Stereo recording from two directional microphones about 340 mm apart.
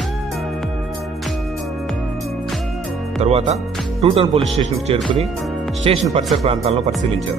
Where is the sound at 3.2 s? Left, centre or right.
Centre.